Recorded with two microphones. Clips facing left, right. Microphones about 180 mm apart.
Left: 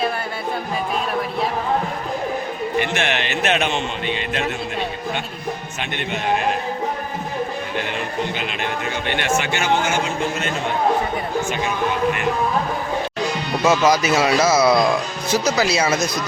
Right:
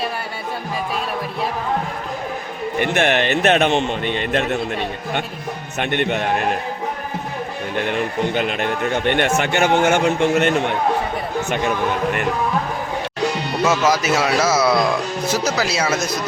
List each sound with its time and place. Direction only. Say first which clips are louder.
2.8 s a man's voice: right 5 dB; 50° right (ahead or behind)
5.8 s a man's voice: right 8 dB; 60° right (ahead or behind)
7.9 s a man's voice: right 4 dB; 55° right (ahead or behind)
13.7 s speech: left 2 dB; 5° right (ahead or behind)